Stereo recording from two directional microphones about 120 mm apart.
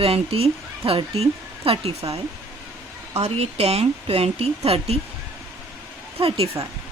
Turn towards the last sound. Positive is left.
turn(degrees=-50)  # may be behind; listen again after turning